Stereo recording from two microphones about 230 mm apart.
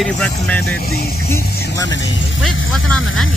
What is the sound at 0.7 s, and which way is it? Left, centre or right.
Speech, left.